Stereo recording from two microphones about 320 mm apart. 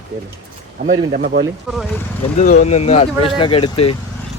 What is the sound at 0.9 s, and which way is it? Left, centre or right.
Speech, right.